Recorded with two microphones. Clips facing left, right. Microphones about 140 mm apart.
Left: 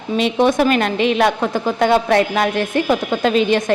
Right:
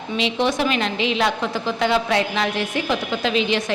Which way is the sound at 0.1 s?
50° left (ahead or behind).